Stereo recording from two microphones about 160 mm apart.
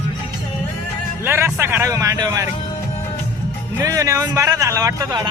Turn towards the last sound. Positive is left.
turn(degrees=-25)  # may be behind; listen again after turning